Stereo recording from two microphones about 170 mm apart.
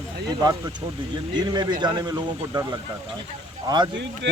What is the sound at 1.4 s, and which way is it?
Speech, 25° right (ahead or behind).